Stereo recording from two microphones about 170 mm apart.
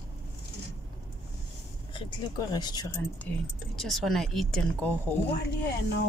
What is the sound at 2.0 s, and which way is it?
Speech, 25° left (ahead or behind).